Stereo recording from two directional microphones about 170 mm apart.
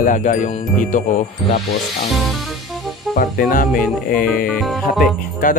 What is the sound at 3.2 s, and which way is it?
Speech, 50° left (ahead or behind).